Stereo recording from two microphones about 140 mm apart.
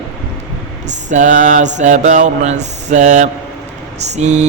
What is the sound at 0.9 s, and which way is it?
Speech, 60° right (ahead or behind).